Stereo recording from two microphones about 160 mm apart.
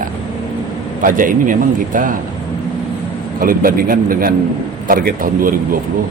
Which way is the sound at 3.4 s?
65° right (ahead or behind).